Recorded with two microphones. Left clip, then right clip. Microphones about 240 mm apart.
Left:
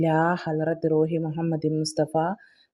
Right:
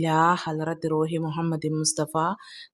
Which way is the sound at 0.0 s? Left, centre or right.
Centre.